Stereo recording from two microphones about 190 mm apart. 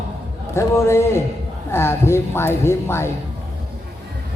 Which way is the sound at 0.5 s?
15° left (ahead or behind).